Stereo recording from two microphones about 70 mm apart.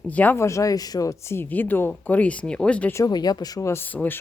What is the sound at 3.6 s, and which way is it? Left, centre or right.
Speech, left.